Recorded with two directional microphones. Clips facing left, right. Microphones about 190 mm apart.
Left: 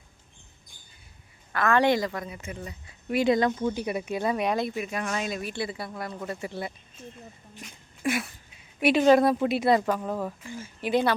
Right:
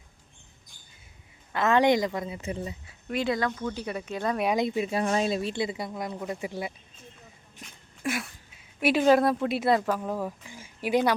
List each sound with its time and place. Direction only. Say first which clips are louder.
1.5 s speech: right 1 dB; 20° right (ahead or behind)
3.2 s speech: left 6 dB; 20° left (ahead or behind)
4.5 s speech: right 3 dB; 20° right (ahead or behind)
8.0 s a sound: left 3 dB; centre (ahead or behind)
8.8 s speech: left 2 dB; centre (ahead or behind)